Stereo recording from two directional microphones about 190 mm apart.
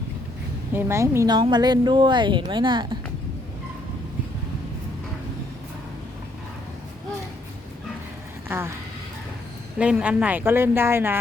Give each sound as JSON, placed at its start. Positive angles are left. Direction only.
{"t": 0.7, "sound": "a woman's voice", "side_deg": -10}
{"t": 8.4, "sound": "speech", "side_deg": -15}
{"t": 9.7, "sound": "speech", "side_deg": -5}